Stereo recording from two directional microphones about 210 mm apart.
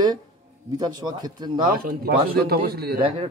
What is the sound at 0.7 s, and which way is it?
Speech, 20° right (ahead or behind).